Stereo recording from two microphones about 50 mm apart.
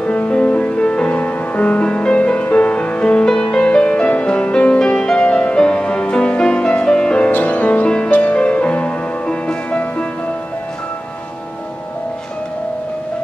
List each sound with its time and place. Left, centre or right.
0.0 s music: left